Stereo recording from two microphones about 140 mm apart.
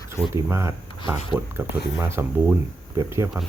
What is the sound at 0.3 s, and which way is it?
Speech, 20° right (ahead or behind).